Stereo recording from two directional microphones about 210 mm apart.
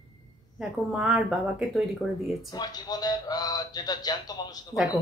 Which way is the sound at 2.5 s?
20° left (ahead or behind).